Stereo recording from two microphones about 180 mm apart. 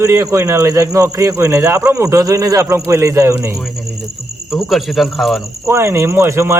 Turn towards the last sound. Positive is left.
turn(degrees=-15)  # may be behind; listen again after turning